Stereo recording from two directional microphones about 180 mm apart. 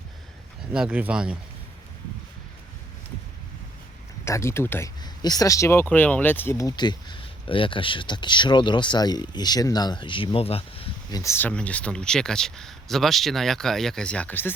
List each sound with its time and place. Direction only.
0.7 s speech: 5° right (ahead or behind)
4.3 s speech: 15° left (ahead or behind); by 10.8 s 30° left (ahead or behind)
11.1 s speech: 15° left (ahead or behind)